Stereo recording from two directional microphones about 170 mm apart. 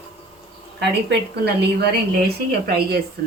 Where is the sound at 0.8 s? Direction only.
80° right.